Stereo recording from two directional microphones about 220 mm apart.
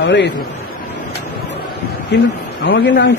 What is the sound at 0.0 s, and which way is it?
Speech, 50° left (ahead or behind).